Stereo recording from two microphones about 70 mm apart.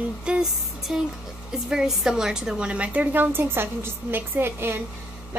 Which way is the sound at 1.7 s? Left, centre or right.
Centre.